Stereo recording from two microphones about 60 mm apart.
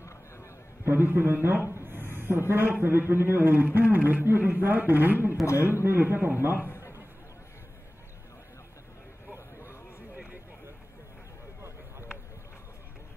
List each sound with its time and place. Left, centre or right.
0.8 s a man's voice: right
1.8 s a sound: right
2.8 s a man's voice: right